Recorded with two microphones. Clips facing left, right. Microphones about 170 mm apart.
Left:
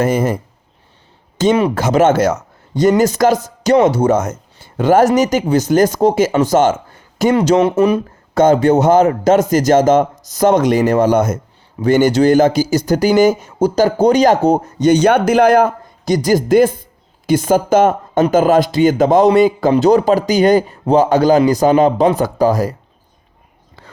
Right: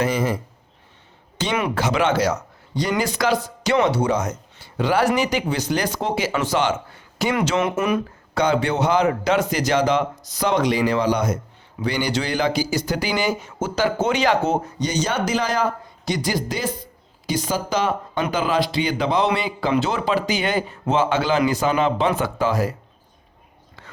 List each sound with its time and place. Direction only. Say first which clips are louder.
0.0 s speech: left 6 dB; 50° left (ahead or behind)
1.4 s a man's voice: left 9 dB; 45° left (ahead or behind)
7.3 s speech: left 10 dB; 35° left (ahead or behind)
8.4 s speech: left 9 dB; 45° left (ahead or behind)
23.8 s whispering: left 3 dB; 35° left (ahead or behind)